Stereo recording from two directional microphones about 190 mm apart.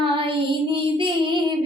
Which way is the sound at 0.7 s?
25° right (ahead or behind).